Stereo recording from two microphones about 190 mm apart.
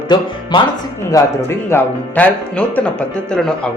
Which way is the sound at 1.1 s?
10° left (ahead or behind).